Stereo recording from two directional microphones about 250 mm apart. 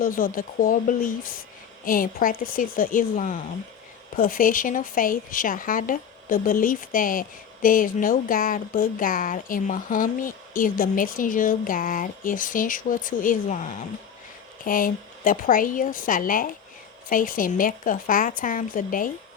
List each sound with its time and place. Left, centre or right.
0.0 s a woman's voice: left